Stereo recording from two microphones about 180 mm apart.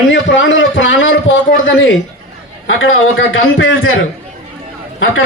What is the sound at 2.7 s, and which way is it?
A man's voice, 90° left.